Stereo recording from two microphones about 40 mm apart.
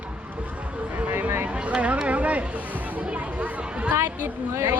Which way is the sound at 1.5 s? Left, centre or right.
Right.